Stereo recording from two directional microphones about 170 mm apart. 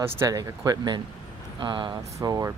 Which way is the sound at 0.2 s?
20° right (ahead or behind).